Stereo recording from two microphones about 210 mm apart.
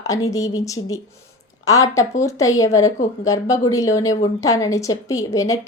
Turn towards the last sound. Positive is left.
turn(degrees=15)  # may be behind; listen again after turning